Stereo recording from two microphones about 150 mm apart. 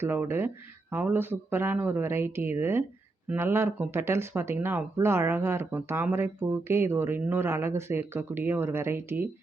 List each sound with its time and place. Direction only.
0.0 s speech: 15° right (ahead or behind)